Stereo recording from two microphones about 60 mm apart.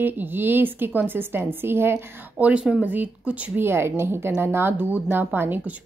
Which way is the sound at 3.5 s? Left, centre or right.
Right.